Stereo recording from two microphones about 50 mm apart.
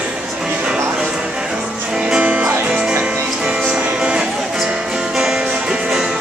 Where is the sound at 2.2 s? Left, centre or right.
Right.